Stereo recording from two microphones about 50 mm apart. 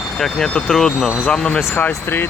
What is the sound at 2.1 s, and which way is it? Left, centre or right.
Speech, left.